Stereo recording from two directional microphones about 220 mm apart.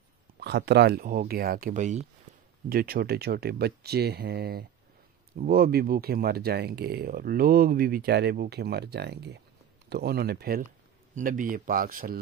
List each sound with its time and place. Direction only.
0.4 s speech: 50° right (ahead or behind)